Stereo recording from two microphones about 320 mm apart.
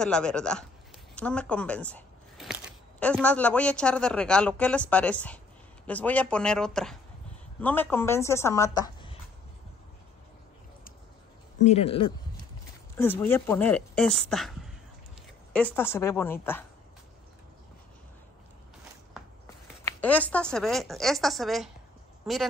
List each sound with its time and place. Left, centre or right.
0.0 s a woman's voice: centre
11.6 s a woman's voice: centre
12.9 s speech: centre
15.5 s a woman's voice: centre
19.8 s speech: centre